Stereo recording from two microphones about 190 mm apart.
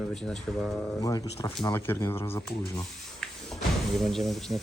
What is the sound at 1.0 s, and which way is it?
Speech, 20° left (ahead or behind).